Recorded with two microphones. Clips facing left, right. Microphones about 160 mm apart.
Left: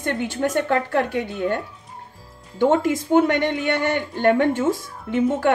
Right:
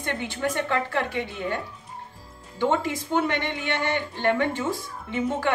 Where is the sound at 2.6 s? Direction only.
50° left (ahead or behind).